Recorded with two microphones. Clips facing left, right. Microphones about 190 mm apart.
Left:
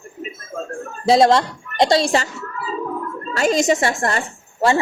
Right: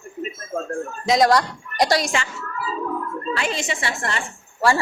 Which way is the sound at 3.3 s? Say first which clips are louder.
Left 10 dB; 40° left (ahead or behind).